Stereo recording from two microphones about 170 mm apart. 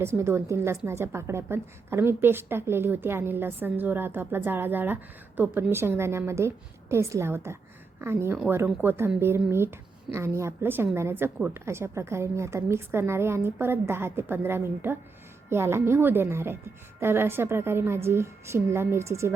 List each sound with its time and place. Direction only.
0.2 s a woman's voice: 15° right (ahead or behind)